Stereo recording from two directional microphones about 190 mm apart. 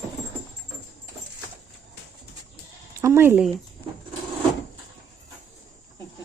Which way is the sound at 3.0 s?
15° right (ahead or behind).